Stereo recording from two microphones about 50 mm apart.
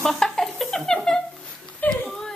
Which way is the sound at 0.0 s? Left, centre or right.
Centre.